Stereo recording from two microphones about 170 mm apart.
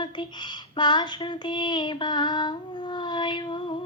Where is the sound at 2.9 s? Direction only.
25° left (ahead or behind).